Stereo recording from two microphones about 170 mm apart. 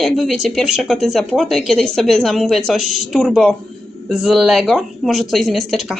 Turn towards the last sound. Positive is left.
turn(degrees=0)  # may be behind; listen again after turning